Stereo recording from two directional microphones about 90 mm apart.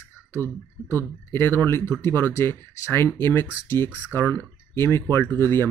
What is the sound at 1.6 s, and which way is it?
Speech, 30° left (ahead or behind).